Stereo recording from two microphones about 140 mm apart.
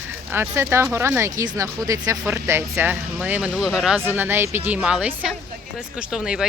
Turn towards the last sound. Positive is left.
turn(degrees=-5)  # may be behind; listen again after turning